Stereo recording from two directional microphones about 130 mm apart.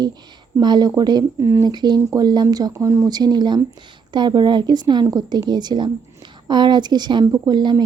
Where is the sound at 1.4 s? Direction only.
20° right (ahead or behind).